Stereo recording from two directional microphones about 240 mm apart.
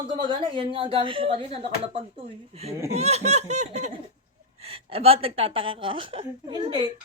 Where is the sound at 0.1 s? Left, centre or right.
Centre.